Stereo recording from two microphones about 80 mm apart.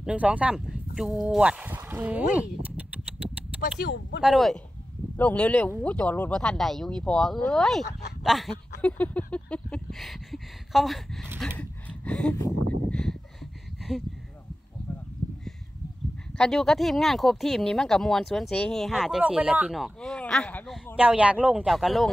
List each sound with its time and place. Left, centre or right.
0.0 s speech: centre
1.4 s speech: centre
5.1 s speech: centre
8.8 s speech: centre
9.8 s speech: centre
11.5 s a sound: centre
16.3 s speech: centre
20.0 s speech: centre
20.9 s speech: centre
21.7 s speech: centre